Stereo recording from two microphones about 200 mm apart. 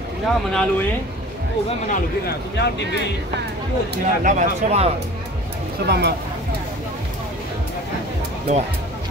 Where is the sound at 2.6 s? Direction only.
60° left (ahead or behind).